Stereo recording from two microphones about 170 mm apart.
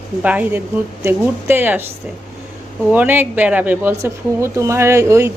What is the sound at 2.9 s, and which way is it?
Speech, 10° right (ahead or behind).